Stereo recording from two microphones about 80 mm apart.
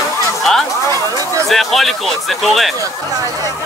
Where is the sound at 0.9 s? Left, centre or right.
Right.